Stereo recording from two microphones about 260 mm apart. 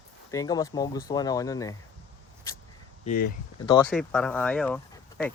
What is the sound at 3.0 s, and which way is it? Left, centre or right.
Speech, left.